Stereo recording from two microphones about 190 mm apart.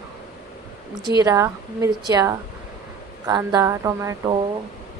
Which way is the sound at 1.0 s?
20° right (ahead or behind).